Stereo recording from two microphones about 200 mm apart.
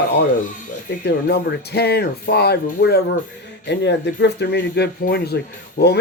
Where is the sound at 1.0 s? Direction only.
55° left (ahead or behind).